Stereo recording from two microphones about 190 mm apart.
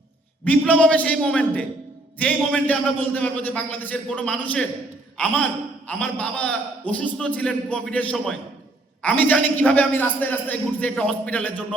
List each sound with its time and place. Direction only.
0.4 s a man's voice: 10° left (ahead or behind)